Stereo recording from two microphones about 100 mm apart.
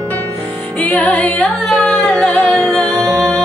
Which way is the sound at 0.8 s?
15° left (ahead or behind).